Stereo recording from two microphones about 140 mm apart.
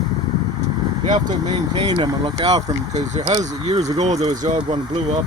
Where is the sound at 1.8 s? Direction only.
35° right (ahead or behind).